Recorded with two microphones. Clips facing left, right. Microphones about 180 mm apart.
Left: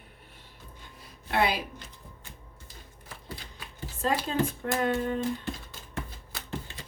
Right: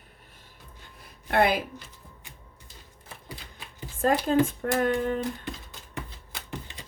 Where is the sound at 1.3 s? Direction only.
50° right (ahead or behind).